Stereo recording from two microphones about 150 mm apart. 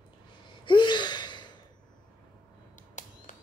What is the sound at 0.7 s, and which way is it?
Gasp, 30° left (ahead or behind).